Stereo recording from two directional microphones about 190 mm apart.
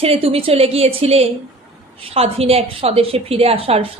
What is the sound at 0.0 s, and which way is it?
A woman's voice, 30° right (ahead or behind).